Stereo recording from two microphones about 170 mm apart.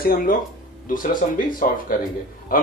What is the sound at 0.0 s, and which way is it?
Speech, 60° left (ahead or behind).